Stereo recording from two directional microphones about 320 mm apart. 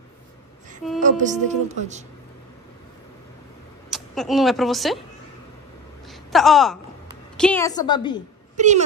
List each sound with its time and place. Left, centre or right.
1.0 s a woman's voice: right
3.9 s a woman's voice: centre
6.0 s a sound: centre
7.3 s a woman's voice: centre
8.5 s a woman's voice: right